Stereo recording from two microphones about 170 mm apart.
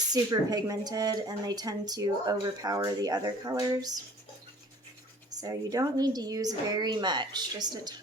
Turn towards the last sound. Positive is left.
turn(degrees=-25)  # may be behind; listen again after turning